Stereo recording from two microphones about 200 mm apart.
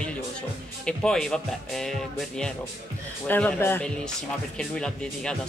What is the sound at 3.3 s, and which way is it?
Speech, 10° left (ahead or behind).